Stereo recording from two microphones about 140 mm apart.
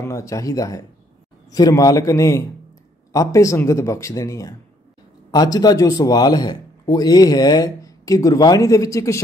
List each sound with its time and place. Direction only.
0.0 s speech: 20° left (ahead or behind)